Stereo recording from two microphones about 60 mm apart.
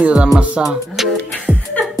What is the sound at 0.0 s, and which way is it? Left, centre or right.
Speech, centre.